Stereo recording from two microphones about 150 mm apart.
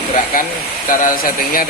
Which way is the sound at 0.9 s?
70° left (ahead or behind).